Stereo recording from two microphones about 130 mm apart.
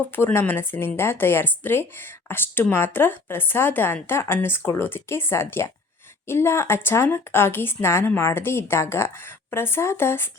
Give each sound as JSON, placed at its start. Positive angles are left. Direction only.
{"t": 0.2, "sound": "a woman's voice", "side_deg": 15}